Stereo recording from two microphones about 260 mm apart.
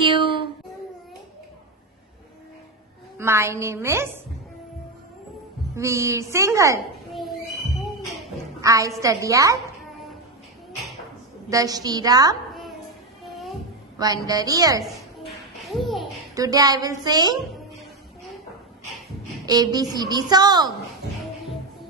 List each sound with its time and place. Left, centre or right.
0.0 s child singing: centre
3.2 s a woman's voice: centre
5.8 s a woman's voice: centre
7.1 s a sound: centre
8.5 s a woman's voice: centre
11.4 s a woman's voice: centre
13.9 s a woman's voice: centre
14.9 s a sound: centre
16.3 s a woman's voice: centre
19.4 s a woman's voice: centre